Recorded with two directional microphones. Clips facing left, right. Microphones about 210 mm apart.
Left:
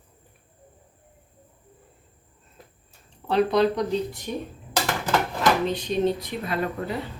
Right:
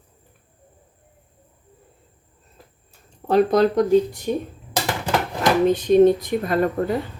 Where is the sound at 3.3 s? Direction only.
45° right (ahead or behind).